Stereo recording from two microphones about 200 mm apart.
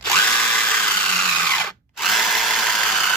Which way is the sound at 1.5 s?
5° left (ahead or behind).